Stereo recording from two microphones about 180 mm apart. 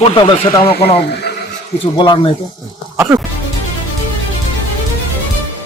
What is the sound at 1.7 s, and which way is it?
Speech, 25° left (ahead or behind).